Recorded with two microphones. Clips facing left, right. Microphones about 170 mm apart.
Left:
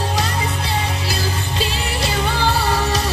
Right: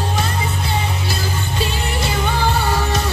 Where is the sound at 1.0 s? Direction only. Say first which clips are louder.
Even; 35° left (ahead or behind).